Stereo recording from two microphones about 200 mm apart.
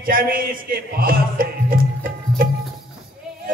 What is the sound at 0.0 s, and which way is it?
A man's voice, 45° right (ahead or behind).